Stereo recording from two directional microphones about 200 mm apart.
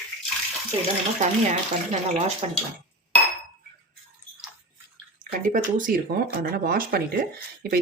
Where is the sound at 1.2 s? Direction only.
35° right (ahead or behind).